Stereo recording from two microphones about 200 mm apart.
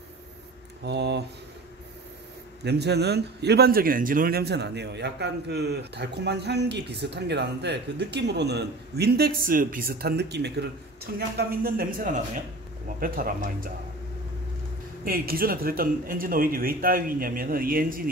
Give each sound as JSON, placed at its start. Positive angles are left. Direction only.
{"t": 0.8, "sound": "a man's voice", "side_deg": -60}
{"t": 2.6, "sound": "a man's voice", "side_deg": -55}
{"t": 15.0, "sound": "a man's voice", "side_deg": -50}